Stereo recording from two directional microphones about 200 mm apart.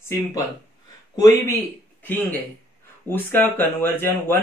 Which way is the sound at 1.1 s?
15° left (ahead or behind).